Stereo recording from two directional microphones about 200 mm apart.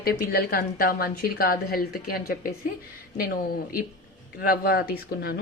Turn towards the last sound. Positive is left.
turn(degrees=50)  # may be behind; listen again after turning